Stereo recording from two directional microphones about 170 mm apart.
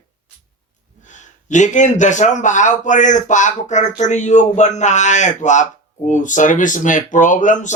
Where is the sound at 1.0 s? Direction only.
45° left (ahead or behind).